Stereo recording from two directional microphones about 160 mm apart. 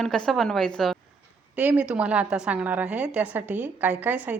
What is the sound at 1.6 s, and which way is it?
A woman's voice, 10° right (ahead or behind).